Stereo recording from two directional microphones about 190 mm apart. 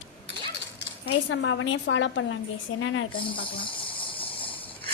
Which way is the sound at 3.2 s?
25° left (ahead or behind).